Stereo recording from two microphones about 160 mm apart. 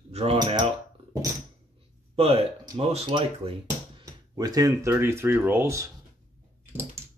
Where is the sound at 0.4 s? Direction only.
25° right (ahead or behind).